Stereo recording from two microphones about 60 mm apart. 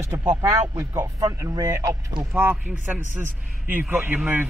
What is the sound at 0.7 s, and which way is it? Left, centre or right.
Speech, right.